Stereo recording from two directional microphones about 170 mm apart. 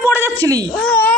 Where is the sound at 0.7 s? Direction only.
10° left (ahead or behind).